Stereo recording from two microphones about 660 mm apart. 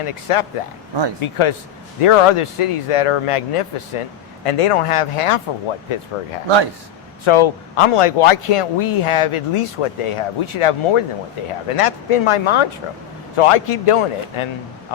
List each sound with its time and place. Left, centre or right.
0.0 s speech: left
7.3 s speech: left